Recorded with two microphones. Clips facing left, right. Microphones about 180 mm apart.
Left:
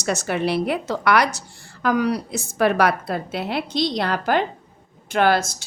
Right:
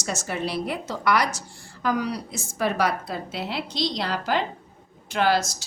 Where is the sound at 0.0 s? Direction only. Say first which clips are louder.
Left 6 dB; 65° left (ahead or behind).